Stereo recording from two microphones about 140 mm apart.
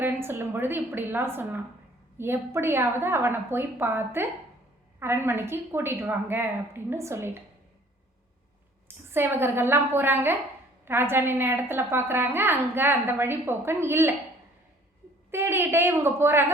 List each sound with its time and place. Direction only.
0.0 s a woman's voice: 15° right (ahead or behind)
9.1 s a woman's voice: 15° right (ahead or behind)
15.3 s a woman's voice: 15° right (ahead or behind)